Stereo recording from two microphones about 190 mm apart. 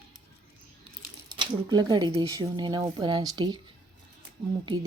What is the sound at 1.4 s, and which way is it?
Speech, 20° right (ahead or behind).